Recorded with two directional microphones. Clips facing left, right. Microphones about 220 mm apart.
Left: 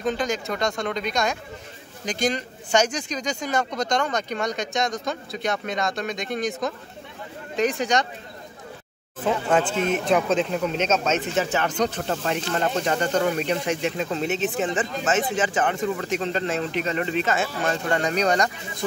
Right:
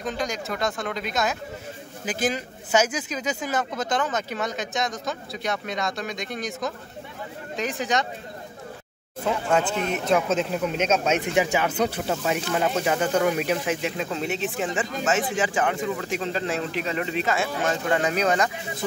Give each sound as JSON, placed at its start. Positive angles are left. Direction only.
{"t": 0.0, "sound": "speech", "side_deg": 0}
{"t": 10.0, "sound": "speech", "side_deg": 0}